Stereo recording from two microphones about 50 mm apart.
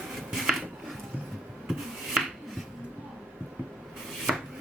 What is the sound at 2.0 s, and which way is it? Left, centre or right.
Finger snapping, centre.